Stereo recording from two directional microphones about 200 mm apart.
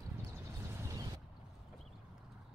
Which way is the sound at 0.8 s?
20° right (ahead or behind).